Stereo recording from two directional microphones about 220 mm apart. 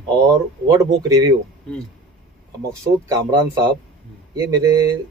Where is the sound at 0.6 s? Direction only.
15° right (ahead or behind).